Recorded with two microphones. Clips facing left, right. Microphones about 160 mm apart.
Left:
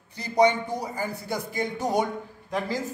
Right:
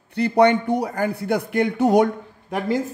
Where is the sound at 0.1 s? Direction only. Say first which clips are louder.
Right 5 dB; 65° right (ahead or behind).